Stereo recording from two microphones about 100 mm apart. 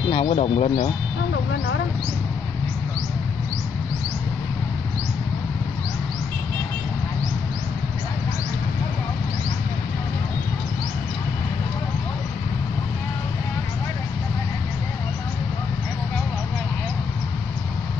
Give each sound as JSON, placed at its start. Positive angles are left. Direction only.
{"t": 0.1, "sound": "speech", "side_deg": 80}